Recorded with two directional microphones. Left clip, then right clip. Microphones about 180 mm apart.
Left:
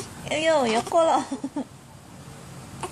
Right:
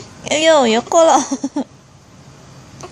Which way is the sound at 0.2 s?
50° right (ahead or behind).